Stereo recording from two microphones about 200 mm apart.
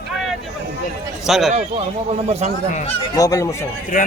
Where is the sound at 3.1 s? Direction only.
15° left (ahead or behind).